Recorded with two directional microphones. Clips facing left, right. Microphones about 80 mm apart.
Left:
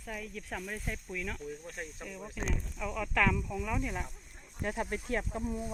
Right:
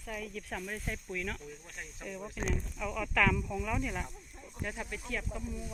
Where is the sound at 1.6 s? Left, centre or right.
Left.